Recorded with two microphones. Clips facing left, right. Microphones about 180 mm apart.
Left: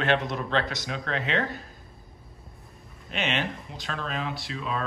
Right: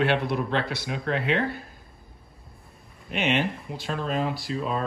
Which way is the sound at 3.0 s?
55° right (ahead or behind).